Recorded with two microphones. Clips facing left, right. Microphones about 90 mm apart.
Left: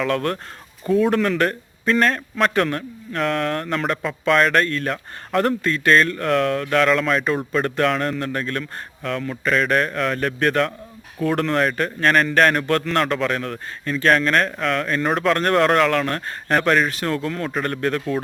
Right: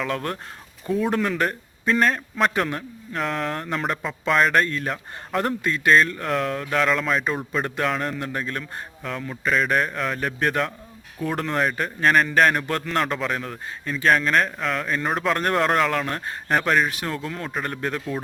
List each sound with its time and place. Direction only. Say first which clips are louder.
0.0 s a man's voice: left 5 dB; 5° right (ahead or behind)